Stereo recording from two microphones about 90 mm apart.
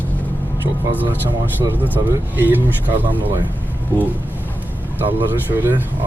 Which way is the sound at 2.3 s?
20° right (ahead or behind).